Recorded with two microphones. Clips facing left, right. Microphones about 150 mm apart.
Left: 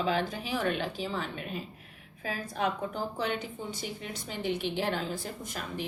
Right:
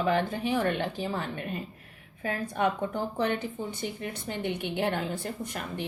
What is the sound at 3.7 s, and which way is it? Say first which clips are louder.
A woman's voice: right 4 dB; 60° right (ahead or behind).